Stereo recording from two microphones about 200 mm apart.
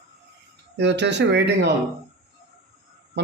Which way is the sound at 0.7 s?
60° right (ahead or behind).